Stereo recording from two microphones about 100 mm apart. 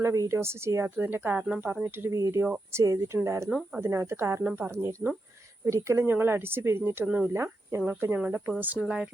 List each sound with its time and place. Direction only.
0.0 s speech: 30° right (ahead or behind)
2.0 s speech: 30° right (ahead or behind)
7.3 s speech: 30° right (ahead or behind)